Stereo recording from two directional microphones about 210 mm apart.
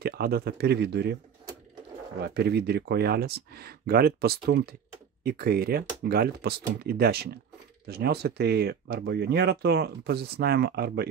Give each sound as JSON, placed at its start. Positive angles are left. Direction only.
{"t": 0.0, "sound": "speech", "side_deg": -50}
{"t": 2.2, "sound": "speech", "side_deg": -50}